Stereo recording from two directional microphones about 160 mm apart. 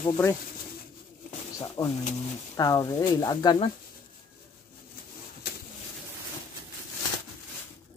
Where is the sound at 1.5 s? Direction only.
20° left (ahead or behind).